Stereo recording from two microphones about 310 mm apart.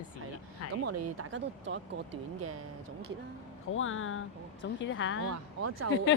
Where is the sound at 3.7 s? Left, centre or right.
Left.